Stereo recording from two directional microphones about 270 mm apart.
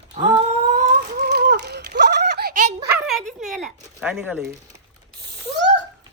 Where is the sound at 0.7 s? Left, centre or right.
Right.